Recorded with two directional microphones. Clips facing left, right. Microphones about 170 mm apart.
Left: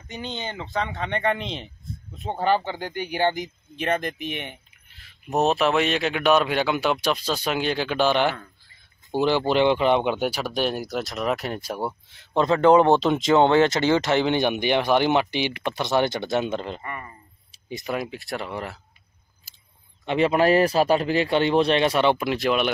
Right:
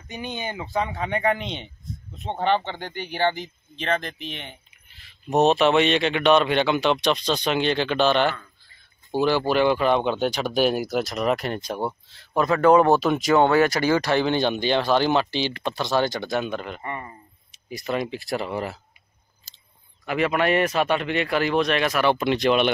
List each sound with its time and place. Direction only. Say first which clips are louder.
0.1 s speech: right 1 dB; 15° right (ahead or behind); by 4.6 s 15° left (ahead or behind)
4.8 s speech: right 4 dB; centre (ahead or behind)
10.5 s speech: right 4 dB; 5° right (ahead or behind)
12.1 s speech: left 2 dB; 20° left (ahead or behind)
16.8 s speech: right 3 dB; 25° right (ahead or behind)
17.5 s a sound: left 1 dB; 25° left (ahead or behind)
17.8 s speech: right 3 dB; 5° left (ahead or behind)
20.1 s speech: left 3 dB; 30° left (ahead or behind)
22.1 s speech: right 2 dB; 5° left (ahead or behind)